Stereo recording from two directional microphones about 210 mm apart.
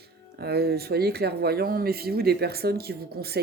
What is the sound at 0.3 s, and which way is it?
Speech, 50° right (ahead or behind).